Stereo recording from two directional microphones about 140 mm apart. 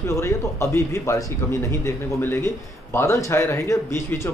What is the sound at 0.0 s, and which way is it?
A man's voice, 20° left (ahead or behind).